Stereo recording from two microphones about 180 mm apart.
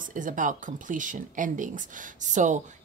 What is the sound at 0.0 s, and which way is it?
Speech, 45° right (ahead or behind).